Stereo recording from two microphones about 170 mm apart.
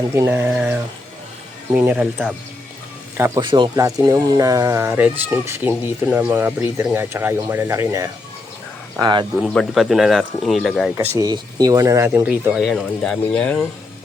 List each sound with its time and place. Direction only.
0.0 s speech: 15° right (ahead or behind)
3.4 s speech: 25° right (ahead or behind)
9.4 s speech: centre (ahead or behind)
10.9 s speech: 15° right (ahead or behind); by 13.7 s 5° left (ahead or behind)